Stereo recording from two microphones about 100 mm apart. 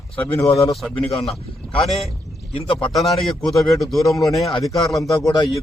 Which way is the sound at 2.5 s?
65° left (ahead or behind).